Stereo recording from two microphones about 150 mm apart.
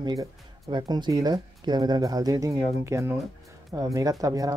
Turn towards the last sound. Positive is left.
turn(degrees=-25)  # may be behind; listen again after turning